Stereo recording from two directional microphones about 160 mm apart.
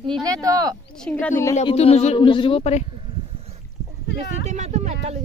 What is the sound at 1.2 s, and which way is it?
Speech, 15° left (ahead or behind).